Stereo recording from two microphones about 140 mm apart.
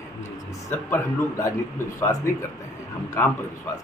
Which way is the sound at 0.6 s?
15° left (ahead or behind).